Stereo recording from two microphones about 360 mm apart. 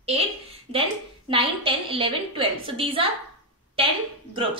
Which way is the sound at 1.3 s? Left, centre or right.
Centre.